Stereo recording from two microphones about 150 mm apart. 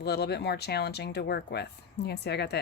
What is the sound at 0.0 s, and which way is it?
A woman's voice, 90° left.